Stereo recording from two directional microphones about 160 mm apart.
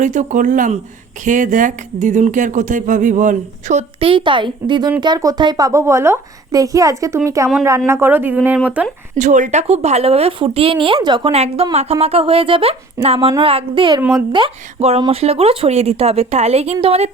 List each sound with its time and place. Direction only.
0.0 s speech: 50° right (ahead or behind)
4.0 s a woman's voice: 30° right (ahead or behind); by 8.9 s 10° right (ahead or behind)
9.1 s speech: 50° right (ahead or behind); by 14.0 s 30° right (ahead or behind)
14.0 s speech: 10° right (ahead or behind)
14.3 s speech: 35° right (ahead or behind)